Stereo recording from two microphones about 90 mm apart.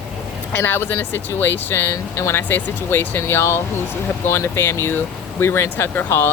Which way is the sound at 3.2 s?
30° left (ahead or behind).